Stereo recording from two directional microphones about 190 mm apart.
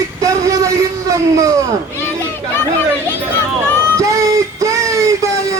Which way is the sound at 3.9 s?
15° right (ahead or behind).